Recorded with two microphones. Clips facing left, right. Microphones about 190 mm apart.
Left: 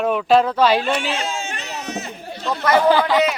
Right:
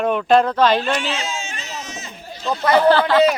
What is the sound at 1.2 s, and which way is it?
Chatter, 55° left (ahead or behind).